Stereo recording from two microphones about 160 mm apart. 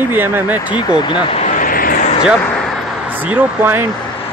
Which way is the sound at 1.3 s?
55° left (ahead or behind).